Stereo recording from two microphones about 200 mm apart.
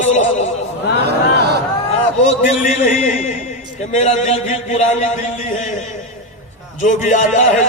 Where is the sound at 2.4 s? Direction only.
40° left (ahead or behind).